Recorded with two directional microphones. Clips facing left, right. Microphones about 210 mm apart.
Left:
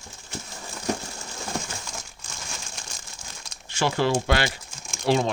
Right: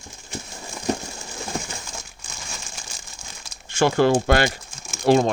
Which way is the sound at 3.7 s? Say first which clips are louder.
Right 6 dB; 50° right (ahead or behind).